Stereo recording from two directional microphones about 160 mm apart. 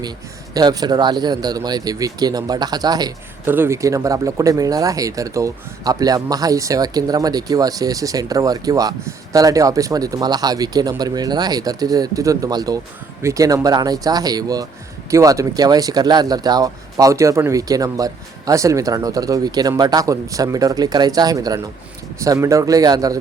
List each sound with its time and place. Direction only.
0.5 s speech: 25° right (ahead or behind)
3.4 s speech: 15° right (ahead or behind)